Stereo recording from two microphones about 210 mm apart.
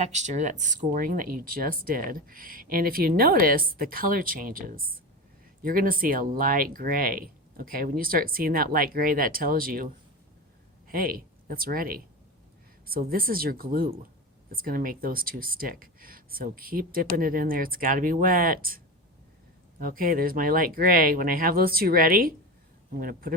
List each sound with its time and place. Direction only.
0.0 s speech: 35° right (ahead or behind)
19.8 s speech: 40° right (ahead or behind)